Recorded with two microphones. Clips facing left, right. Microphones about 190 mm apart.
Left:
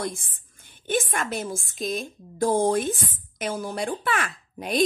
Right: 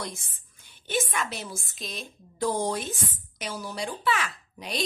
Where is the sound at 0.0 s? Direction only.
50° left (ahead or behind).